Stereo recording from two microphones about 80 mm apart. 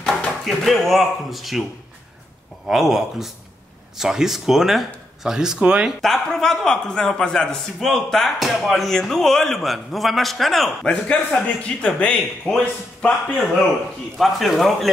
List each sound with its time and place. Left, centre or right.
0.0 s speech: centre
2.7 s a man's voice: centre
5.9 s a man's voice: centre
14.1 s a man's voice: centre